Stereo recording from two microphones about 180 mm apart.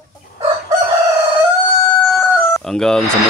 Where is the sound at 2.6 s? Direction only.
5° left (ahead or behind).